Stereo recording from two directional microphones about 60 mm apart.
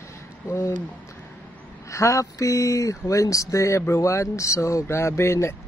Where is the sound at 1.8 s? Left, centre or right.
Left.